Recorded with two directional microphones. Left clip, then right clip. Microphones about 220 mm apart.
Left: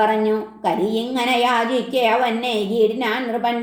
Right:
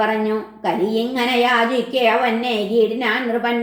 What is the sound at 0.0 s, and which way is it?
A woman's voice, 30° left (ahead or behind).